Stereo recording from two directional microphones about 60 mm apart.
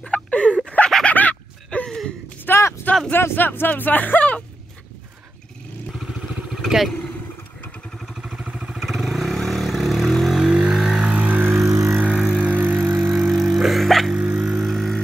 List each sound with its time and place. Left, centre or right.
0.0 s a sound: left
2.5 s a sound: left
3.1 s speech: left
6.5 s vehicle: centre
8.4 s vehicle: centre
10.4 s vehicle: centre; by 11.5 s right
12.1 s vehicle: centre
12.4 s vehicle: right
13.0 s vehicle: centre
13.4 s music: centre
14.1 s a sound: centre
14.4 s vehicle: centre